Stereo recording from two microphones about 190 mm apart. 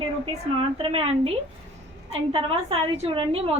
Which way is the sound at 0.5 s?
30° right (ahead or behind).